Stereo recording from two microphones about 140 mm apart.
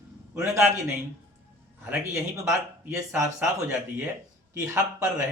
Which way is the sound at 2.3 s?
20° right (ahead or behind).